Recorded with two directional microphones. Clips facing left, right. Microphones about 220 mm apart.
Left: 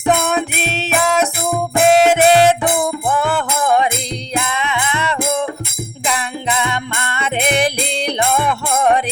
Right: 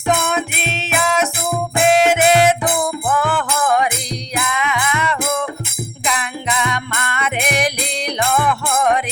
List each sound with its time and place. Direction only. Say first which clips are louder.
0.3 s music: left 3 dB; 35° left (ahead or behind)